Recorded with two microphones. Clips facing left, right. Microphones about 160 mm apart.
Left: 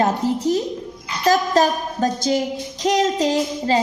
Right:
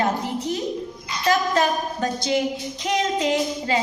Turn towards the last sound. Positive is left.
turn(degrees=35)  # may be behind; listen again after turning